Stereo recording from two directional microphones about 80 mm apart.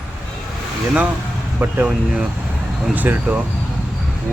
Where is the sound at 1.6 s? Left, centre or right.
Centre.